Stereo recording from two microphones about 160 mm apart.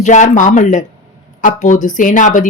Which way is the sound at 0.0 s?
50° left (ahead or behind).